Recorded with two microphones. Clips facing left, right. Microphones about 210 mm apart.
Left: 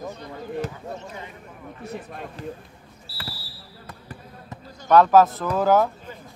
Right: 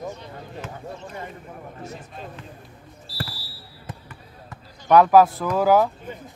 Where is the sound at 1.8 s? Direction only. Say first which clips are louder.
Left 7 dB; 60° left (ahead or behind).